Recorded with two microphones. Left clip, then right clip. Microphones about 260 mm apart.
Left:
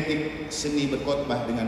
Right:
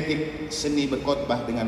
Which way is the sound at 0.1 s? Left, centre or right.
Right.